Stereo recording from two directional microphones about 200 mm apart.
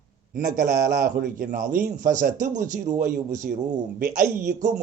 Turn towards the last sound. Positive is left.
turn(degrees=-40)  # may be behind; listen again after turning